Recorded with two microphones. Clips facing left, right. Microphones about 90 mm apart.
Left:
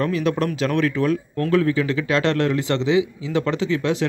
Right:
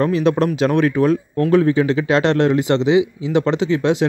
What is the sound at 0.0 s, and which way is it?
A man's voice, 25° right (ahead or behind).